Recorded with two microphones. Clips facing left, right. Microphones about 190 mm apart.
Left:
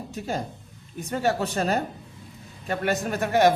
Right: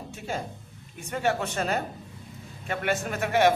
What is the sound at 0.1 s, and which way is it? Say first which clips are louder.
Speech: left 3 dB; 40° left (ahead or behind).